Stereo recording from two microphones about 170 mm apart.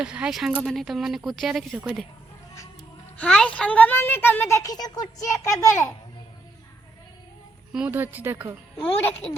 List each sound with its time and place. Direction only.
0.0 s speech: 5° right (ahead or behind)
3.2 s speech: 5° left (ahead or behind)
7.7 s speech: 10° right (ahead or behind)
8.8 s speech: 10° left (ahead or behind)